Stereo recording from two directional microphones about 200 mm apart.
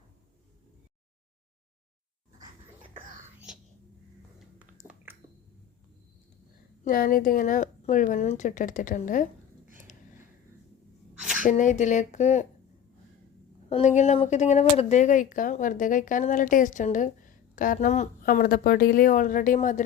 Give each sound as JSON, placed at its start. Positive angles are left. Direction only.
{"t": 4.4, "sound": "a sound", "side_deg": -5}
{"t": 6.8, "sound": "speech", "side_deg": 45}
{"t": 11.4, "sound": "speech", "side_deg": 40}
{"t": 13.7, "sound": "speech", "side_deg": 35}